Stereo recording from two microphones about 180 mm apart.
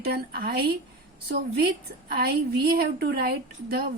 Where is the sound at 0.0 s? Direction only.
60° right (ahead or behind).